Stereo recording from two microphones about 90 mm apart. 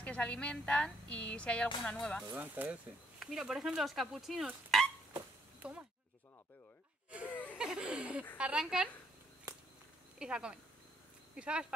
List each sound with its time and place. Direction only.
0.0 s a woman's voice: 10° left (ahead or behind)
2.3 s speech: 20° right (ahead or behind)
3.2 s speech: 5° right (ahead or behind)
5.6 s speech: 15° right (ahead or behind)
7.5 s chuckle: 10° right (ahead or behind)
8.4 s speech: 10° right (ahead or behind)
10.1 s speech: 10° right (ahead or behind)